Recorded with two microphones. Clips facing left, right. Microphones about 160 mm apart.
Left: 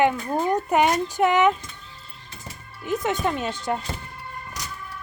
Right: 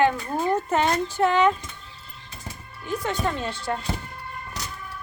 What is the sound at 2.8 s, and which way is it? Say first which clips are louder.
Speech: left 2 dB; 20° left (ahead or behind).